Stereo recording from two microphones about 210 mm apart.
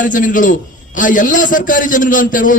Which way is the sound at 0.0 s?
40° left (ahead or behind).